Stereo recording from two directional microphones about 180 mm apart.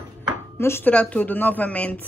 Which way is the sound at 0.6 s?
15° left (ahead or behind).